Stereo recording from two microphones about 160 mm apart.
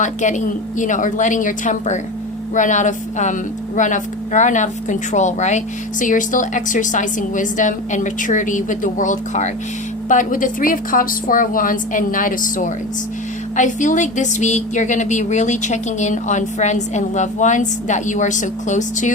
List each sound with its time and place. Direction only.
0.0 s a woman's voice: 50° left (ahead or behind)